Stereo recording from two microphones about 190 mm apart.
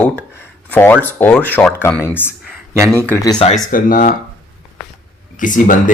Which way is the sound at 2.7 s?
15° right (ahead or behind).